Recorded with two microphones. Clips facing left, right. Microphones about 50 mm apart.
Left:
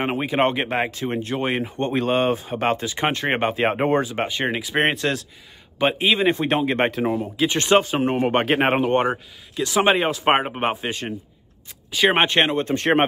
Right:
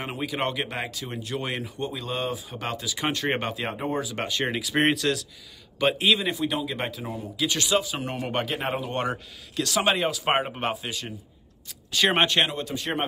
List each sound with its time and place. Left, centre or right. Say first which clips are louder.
0.0 s speech: left 8 dB; left
1.8 s speech: left 12 dB; left
3.7 s speech: left 9 dB; left
4.0 s speech: left 4 dB; left
5.8 s a man's voice: left 3 dB; left
6.1 s speech: left 8 dB; left
6.4 s speech: left 8 dB; left
8.5 s speech: left 10 dB; left
8.9 s speech: left 8 dB; left
11.9 s speech: left 4 dB; centre; by 13.0 s left